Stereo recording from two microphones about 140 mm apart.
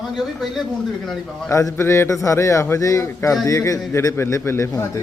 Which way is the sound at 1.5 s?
20° left (ahead or behind).